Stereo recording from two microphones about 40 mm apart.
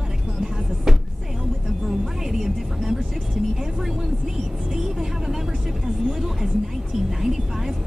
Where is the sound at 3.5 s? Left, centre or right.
Centre.